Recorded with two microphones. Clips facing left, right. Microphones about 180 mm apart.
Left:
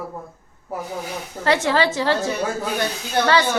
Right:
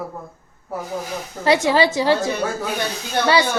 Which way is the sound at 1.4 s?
15° right (ahead or behind).